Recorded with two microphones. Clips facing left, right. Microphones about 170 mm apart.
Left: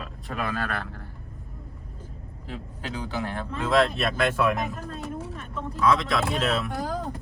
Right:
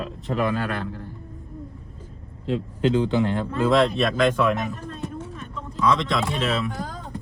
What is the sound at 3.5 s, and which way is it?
Speech, centre (ahead or behind).